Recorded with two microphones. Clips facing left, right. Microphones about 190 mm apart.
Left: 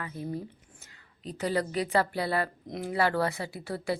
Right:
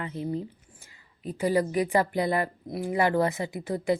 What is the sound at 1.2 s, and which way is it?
Speech, 10° right (ahead or behind).